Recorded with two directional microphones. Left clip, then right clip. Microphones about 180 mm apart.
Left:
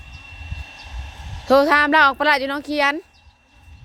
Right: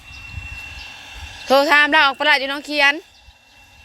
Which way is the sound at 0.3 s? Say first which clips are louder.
Right 6 dB; 45° right (ahead or behind).